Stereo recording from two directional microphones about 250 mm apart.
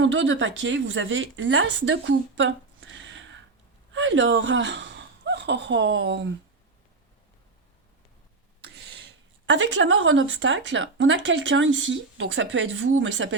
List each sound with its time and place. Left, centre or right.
0.0 s speech: right
9.5 s speech: right